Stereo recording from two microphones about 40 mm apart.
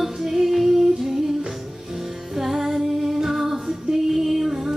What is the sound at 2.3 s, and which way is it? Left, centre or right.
Music, centre.